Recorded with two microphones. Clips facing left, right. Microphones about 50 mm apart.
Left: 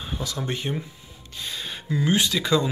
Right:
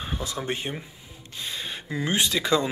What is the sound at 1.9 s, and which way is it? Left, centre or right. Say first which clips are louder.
Speech: left 3 dB; right.